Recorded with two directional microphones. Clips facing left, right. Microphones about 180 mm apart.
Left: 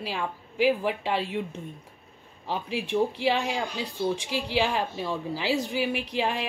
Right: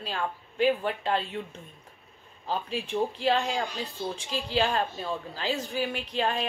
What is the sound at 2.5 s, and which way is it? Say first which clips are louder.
Speech: left 1 dB; 75° left (ahead or behind).